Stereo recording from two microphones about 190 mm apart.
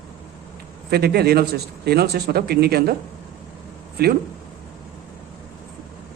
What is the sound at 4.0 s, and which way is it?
Speech, 55° right (ahead or behind).